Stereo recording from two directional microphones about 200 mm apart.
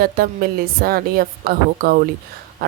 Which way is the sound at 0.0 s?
50° right (ahead or behind).